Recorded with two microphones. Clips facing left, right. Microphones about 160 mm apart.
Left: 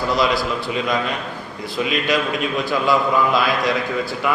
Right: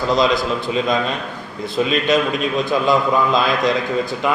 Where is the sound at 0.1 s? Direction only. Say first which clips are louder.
Right 3 dB; 20° right (ahead or behind).